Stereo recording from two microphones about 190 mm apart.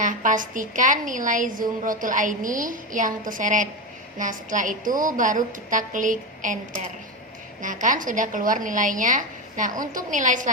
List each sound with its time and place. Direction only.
0.0 s a woman's voice: 45° right (ahead or behind)